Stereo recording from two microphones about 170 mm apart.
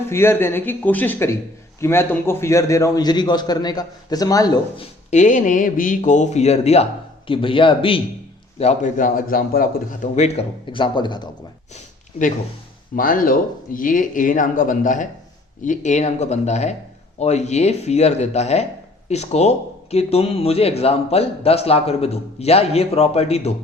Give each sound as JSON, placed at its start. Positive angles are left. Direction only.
{"t": 0.1, "sound": "a man's voice", "side_deg": 15}
{"t": 5.1, "sound": "a man's voice", "side_deg": 45}
{"t": 8.5, "sound": "speech", "side_deg": 45}
{"t": 10.2, "sound": "a man's voice", "side_deg": 40}
{"t": 13.0, "sound": "a man's voice", "side_deg": 55}